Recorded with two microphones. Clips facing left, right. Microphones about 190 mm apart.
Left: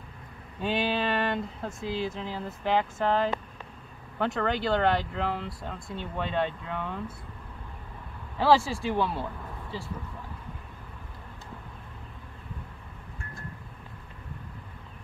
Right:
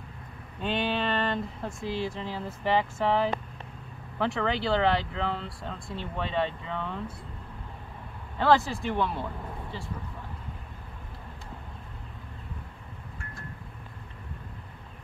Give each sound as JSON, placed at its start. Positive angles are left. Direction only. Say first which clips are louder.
{"t": 0.6, "sound": "speech", "louder": "left 1 dB", "side_deg": 5}
{"t": 8.4, "sound": "speech", "louder": "left 1 dB", "side_deg": 10}